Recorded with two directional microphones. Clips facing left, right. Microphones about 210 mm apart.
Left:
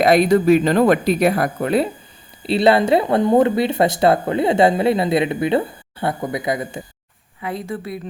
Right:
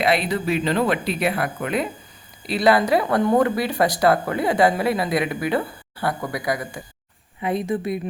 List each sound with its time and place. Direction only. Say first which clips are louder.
0.0 s speech: left 8 dB; 45° left (ahead or behind); by 6.8 s 25° left (ahead or behind)
7.4 s a woman's voice: right 4 dB; 20° right (ahead or behind)